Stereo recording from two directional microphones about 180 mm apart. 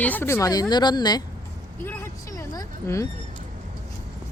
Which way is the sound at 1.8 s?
15° left (ahead or behind).